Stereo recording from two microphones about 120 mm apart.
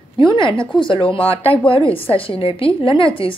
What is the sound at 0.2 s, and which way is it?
A woman's voice, 45° left (ahead or behind).